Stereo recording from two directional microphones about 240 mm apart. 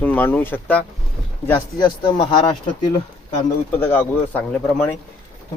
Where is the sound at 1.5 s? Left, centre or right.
Centre.